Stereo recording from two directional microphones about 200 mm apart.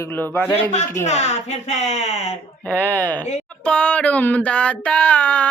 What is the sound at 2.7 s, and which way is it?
A woman's voice, 10° left (ahead or behind).